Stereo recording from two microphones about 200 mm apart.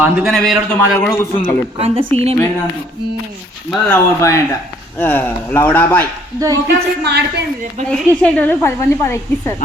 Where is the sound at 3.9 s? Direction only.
15° left (ahead or behind).